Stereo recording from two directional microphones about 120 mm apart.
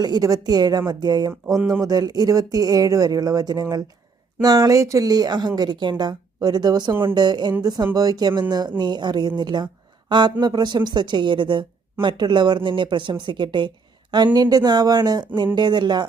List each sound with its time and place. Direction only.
0.0 s speech: 30° right (ahead or behind)